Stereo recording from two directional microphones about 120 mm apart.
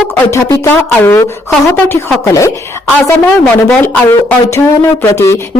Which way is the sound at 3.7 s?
10° left (ahead or behind).